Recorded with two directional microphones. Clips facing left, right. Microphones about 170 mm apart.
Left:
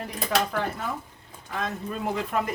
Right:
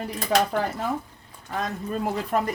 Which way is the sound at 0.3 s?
35° right (ahead or behind).